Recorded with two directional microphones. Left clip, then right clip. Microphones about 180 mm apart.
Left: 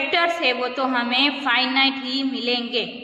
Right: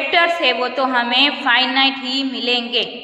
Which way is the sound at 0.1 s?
15° left (ahead or behind).